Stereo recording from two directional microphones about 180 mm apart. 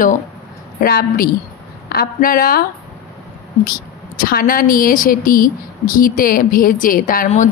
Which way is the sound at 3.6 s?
55° left (ahead or behind).